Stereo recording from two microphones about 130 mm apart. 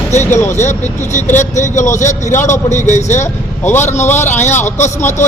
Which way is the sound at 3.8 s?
60° left (ahead or behind).